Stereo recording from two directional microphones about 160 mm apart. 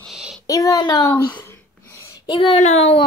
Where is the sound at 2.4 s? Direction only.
40° left (ahead or behind).